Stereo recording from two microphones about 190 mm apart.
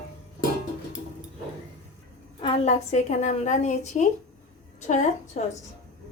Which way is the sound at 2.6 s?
35° left (ahead or behind).